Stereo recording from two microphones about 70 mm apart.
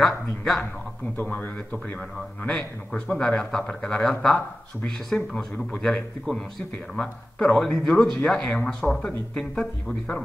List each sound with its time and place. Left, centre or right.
0.0 s speech: centre
1.1 s a man's voice: left; by 5.4 s centre
7.0 s speech: centre